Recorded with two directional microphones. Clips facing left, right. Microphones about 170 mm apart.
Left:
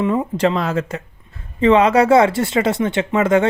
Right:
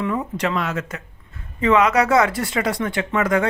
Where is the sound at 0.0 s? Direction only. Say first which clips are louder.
Left 6 dB; 30° left (ahead or behind).